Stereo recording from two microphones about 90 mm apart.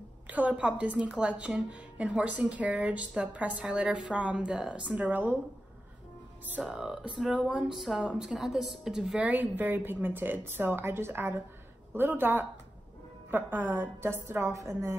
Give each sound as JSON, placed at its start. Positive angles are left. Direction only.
{"t": 0.3, "sound": "a woman's voice", "side_deg": -15}
{"t": 6.5, "sound": "a woman's voice", "side_deg": -10}
{"t": 9.2, "sound": "a woman's voice", "side_deg": -20}